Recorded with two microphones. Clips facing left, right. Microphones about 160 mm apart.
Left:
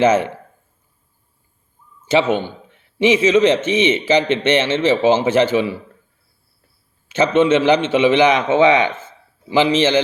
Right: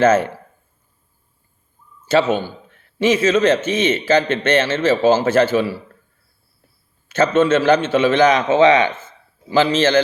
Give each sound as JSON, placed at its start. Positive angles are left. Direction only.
{"t": 0.0, "sound": "a man's voice", "side_deg": 15}
{"t": 2.0, "sound": "a man's voice", "side_deg": 15}
{"t": 7.1, "sound": "a man's voice", "side_deg": 15}